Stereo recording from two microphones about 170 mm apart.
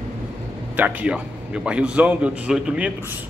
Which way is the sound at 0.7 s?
10° right (ahead or behind).